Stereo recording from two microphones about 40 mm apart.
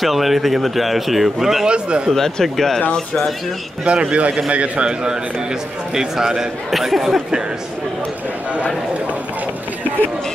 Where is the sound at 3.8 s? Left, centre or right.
Right.